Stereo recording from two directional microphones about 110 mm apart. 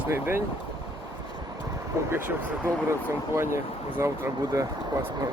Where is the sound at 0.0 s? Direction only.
20° right (ahead or behind).